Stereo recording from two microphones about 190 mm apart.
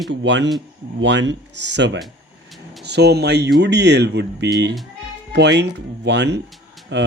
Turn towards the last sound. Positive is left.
turn(degrees=0)  # may be behind; listen again after turning